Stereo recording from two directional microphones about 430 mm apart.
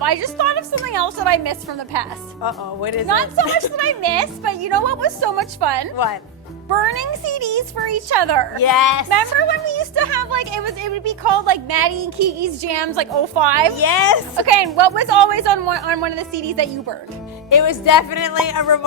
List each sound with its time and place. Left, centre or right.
0.0 s a sound: right
0.9 s a woman's voice: right
2.4 s speech: left
3.1 s a woman's voice: right
8.5 s speech: left
9.0 s a woman's voice: right
13.7 s speech: left
14.3 s a woman's voice: right
17.5 s speech: left